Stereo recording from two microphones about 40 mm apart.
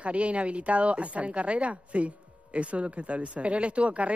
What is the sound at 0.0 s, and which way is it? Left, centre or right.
A woman's voice, right.